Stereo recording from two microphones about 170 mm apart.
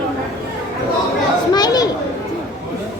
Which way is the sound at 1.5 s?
25° left (ahead or behind).